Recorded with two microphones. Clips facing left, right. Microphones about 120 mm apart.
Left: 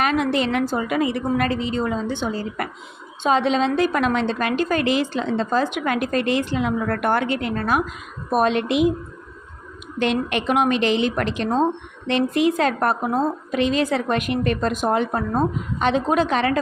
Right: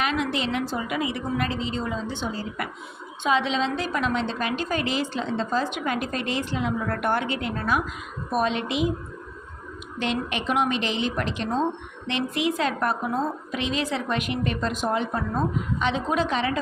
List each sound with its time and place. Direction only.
0.0 s a woman's voice: 50° left (ahead or behind)
10.0 s a woman's voice: 60° left (ahead or behind)
12.0 s a woman's voice: 45° left (ahead or behind); by 16.6 s 60° left (ahead or behind)